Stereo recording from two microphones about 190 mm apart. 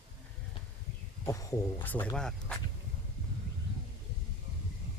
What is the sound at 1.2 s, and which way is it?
Speech, 15° left (ahead or behind).